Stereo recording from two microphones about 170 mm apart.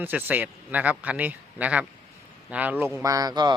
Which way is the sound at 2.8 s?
20° right (ahead or behind).